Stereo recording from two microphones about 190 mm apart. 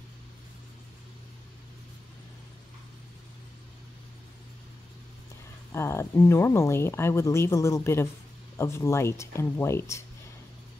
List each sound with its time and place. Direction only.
5.7 s speech: 15° left (ahead or behind)